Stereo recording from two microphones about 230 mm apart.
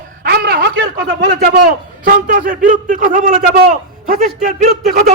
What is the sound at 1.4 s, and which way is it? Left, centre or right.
A man's voice, right.